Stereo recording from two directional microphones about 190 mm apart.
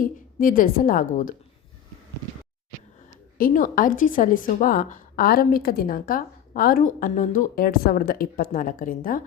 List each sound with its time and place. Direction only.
0.0 s a woman's voice: 45° left (ahead or behind)
3.3 s a woman's voice: 45° left (ahead or behind)